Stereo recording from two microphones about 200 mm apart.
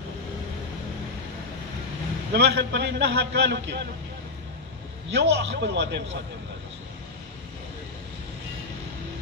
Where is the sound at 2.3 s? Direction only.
60° right (ahead or behind).